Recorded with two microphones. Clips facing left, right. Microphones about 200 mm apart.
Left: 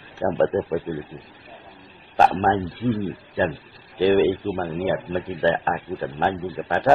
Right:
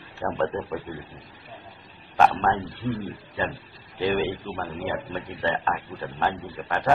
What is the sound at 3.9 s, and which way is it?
A man's voice, 30° left (ahead or behind).